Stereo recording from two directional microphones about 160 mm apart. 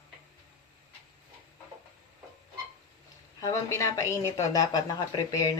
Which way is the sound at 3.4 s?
20° left (ahead or behind).